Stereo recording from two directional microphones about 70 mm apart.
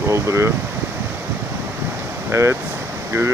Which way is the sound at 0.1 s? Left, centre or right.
Right.